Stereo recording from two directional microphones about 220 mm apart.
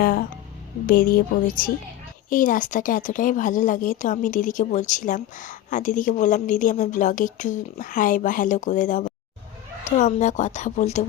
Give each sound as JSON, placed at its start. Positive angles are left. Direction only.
{"t": 0.0, "sound": "speech", "side_deg": 40}